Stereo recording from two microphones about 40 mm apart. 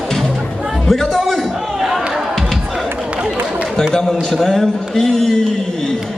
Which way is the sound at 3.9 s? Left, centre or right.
Centre.